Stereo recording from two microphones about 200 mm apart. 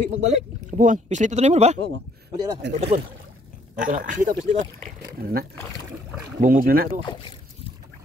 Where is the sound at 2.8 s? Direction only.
30° right (ahead or behind).